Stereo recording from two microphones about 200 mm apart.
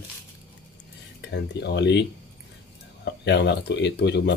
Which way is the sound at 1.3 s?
60° left (ahead or behind).